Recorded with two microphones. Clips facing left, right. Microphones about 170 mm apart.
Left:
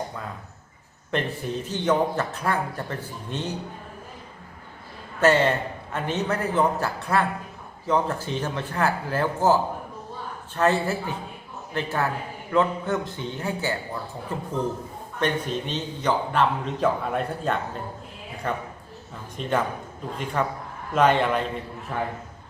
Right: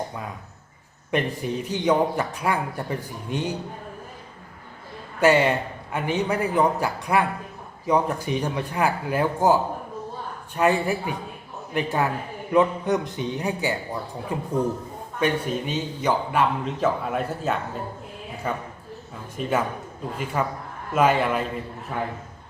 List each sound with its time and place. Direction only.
1.1 s a man's voice: 10° right (ahead or behind)
5.2 s a man's voice: 10° right (ahead or behind)